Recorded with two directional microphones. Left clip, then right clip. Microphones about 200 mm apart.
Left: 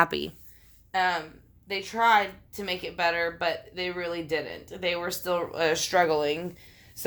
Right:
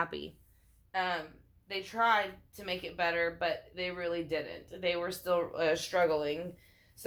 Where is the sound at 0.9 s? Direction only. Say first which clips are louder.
Left 7 dB; 45° left (ahead or behind).